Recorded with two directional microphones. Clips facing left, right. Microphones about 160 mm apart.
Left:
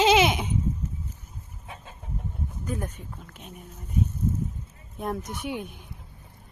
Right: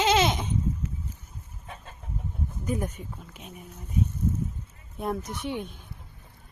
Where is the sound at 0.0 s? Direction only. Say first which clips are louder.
Left 3 dB; 15° left (ahead or behind).